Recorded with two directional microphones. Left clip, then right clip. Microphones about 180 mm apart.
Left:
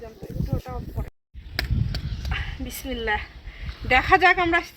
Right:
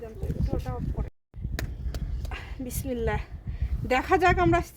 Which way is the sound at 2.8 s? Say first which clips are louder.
Left 4 dB; 50° right (ahead or behind).